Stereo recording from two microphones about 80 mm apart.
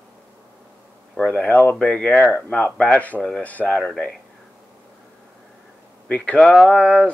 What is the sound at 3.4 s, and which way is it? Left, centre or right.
Speech, centre.